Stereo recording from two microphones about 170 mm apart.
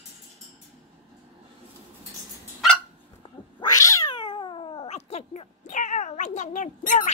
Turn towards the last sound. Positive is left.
turn(degrees=50)  # may be behind; listen again after turning